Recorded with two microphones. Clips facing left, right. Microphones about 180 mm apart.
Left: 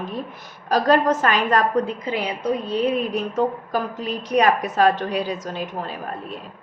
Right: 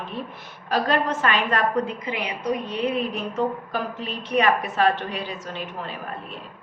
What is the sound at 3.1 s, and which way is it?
A woman's voice, 40° left (ahead or behind).